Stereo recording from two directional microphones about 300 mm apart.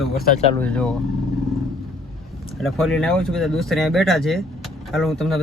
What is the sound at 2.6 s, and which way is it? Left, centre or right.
Speech, centre.